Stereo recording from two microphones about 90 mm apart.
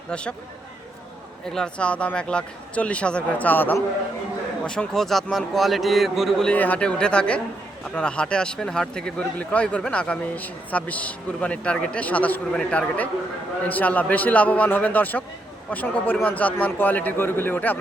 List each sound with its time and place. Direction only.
0.1 s speech: 10° left (ahead or behind)
1.5 s speech: 5° left (ahead or behind)
4.6 s a man's voice: 10° left (ahead or behind)
6.5 s a man's voice: 15° left (ahead or behind)